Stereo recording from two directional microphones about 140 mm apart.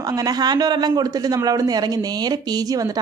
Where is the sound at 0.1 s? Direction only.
25° right (ahead or behind).